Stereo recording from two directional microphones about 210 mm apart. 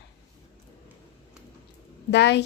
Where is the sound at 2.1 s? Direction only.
55° left (ahead or behind).